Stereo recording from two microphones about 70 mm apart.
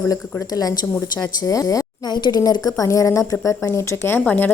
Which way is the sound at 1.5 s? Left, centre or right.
Left.